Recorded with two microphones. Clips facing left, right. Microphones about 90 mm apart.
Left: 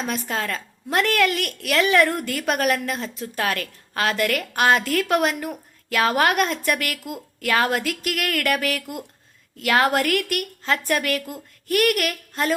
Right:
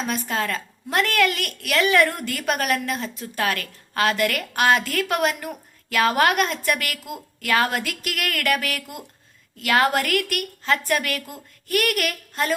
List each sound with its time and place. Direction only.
0.1 s a woman's voice: centre (ahead or behind)